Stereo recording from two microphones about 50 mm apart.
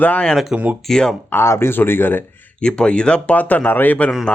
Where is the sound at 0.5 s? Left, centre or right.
Right.